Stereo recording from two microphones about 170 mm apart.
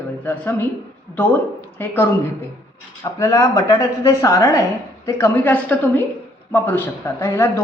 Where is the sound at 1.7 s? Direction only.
10° left (ahead or behind).